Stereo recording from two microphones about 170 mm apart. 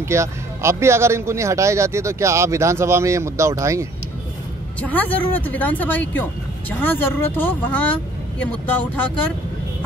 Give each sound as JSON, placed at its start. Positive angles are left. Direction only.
{"t": 0.1, "sound": "speech", "side_deg": -15}
{"t": 4.7, "sound": "speech", "side_deg": 10}